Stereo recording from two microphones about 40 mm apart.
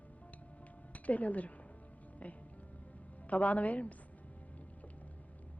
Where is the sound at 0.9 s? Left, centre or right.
Left.